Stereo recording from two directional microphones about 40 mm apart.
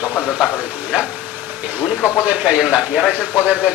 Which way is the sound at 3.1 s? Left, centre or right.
Right.